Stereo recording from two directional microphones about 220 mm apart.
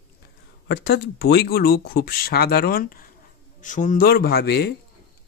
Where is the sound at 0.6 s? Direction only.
50° left (ahead or behind).